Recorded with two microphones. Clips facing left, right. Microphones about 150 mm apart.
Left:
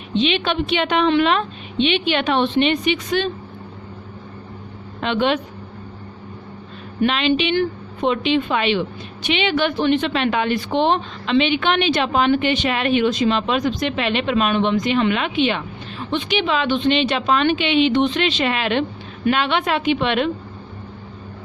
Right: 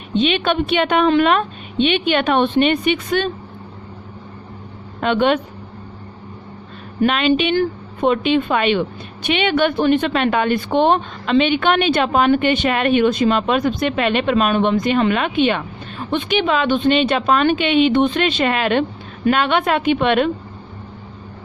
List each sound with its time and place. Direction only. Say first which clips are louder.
0.2 s a woman's voice: right 2 dB; 50° right (ahead or behind)
4.9 s speech: right 3 dB; 50° right (ahead or behind)
7.0 s a woman's voice: right 2 dB; 45° right (ahead or behind)